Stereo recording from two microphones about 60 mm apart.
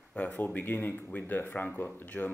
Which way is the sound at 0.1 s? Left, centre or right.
Left.